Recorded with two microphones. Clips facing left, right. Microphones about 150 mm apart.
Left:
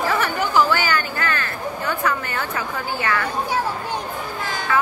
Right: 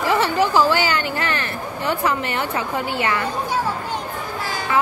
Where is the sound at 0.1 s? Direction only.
25° right (ahead or behind).